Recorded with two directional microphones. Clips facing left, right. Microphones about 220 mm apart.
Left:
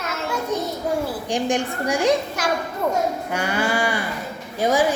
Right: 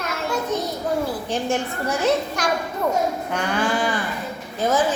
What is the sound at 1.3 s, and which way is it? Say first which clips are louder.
A woman's voice: left 1 dB; 15° left (ahead or behind).